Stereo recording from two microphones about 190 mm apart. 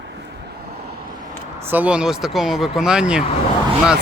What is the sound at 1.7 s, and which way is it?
Speech, 5° right (ahead or behind).